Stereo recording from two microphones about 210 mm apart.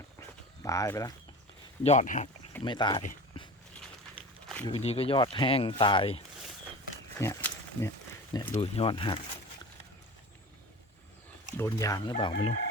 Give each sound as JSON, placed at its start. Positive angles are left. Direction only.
{"t": 0.6, "sound": "speech", "side_deg": 15}
{"t": 1.8, "sound": "speech", "side_deg": 35}
{"t": 2.6, "sound": "speech", "side_deg": 20}
{"t": 3.3, "sound": "dog", "side_deg": 25}
{"t": 4.6, "sound": "speech", "side_deg": 30}
{"t": 7.2, "sound": "a sound", "side_deg": 10}
{"t": 8.7, "sound": "speech", "side_deg": 25}
{"t": 11.5, "sound": "speech", "side_deg": 15}